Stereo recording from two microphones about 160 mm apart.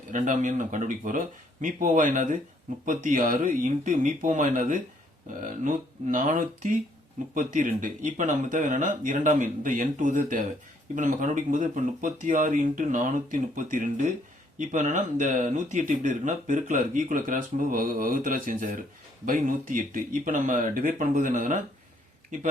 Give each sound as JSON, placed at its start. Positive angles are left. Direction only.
{"t": 0.1, "sound": "speech", "side_deg": -50}